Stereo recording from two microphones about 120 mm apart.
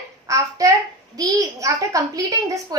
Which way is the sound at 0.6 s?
30° right (ahead or behind).